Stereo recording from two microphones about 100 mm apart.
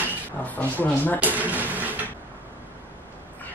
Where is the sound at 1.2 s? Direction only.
15° right (ahead or behind).